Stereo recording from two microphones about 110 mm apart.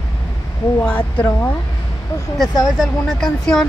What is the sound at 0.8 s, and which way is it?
Speech, 10° left (ahead or behind).